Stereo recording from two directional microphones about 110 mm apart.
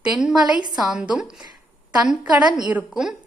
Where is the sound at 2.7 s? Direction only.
10° right (ahead or behind).